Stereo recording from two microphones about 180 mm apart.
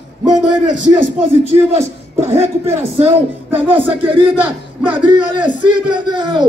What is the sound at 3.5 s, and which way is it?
Music, 10° right (ahead or behind).